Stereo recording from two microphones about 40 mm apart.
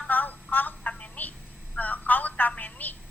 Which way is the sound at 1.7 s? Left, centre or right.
Left.